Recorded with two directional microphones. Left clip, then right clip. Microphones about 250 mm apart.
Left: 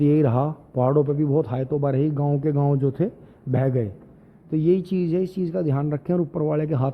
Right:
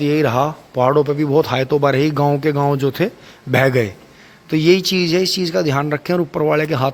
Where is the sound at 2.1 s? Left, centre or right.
Right.